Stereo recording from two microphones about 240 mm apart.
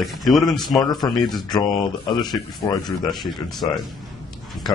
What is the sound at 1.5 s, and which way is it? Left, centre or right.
Speech, centre.